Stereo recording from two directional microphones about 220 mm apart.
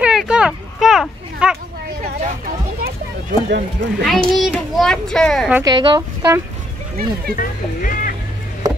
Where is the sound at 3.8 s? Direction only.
55° right (ahead or behind).